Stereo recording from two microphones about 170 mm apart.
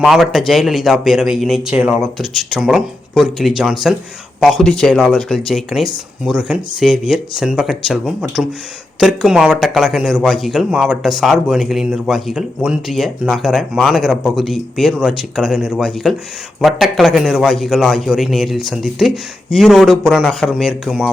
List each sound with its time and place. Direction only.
0.0 s speech: centre (ahead or behind)